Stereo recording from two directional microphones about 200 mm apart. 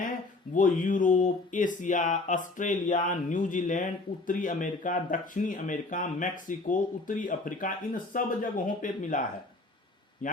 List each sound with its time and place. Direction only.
0.5 s a man's voice: 40° left (ahead or behind)